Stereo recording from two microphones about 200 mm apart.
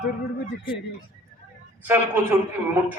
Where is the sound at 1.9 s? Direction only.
10° right (ahead or behind).